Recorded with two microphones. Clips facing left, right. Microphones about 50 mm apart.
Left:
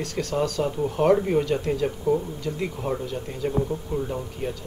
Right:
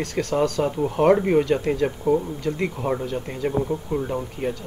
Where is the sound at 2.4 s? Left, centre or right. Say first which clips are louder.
Right 5 dB; centre.